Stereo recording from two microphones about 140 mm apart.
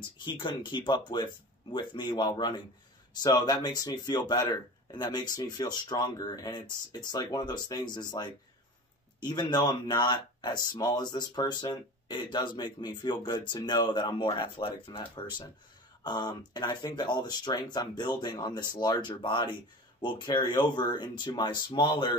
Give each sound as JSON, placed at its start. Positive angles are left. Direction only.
{"t": 0.2, "sound": "speech", "side_deg": 35}
{"t": 9.2, "sound": "speech", "side_deg": 30}